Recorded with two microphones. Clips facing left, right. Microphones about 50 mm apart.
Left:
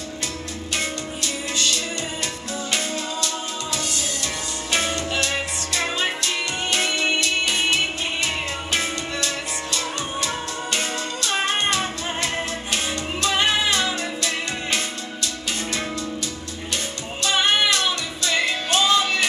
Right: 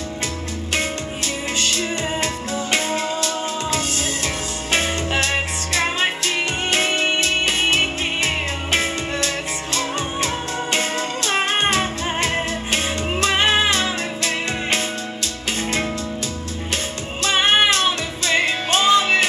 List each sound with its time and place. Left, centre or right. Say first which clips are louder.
0.7 s music: right 3 dB; right
4.6 s music: right 3 dB; right
16.7 s music: right 2 dB; right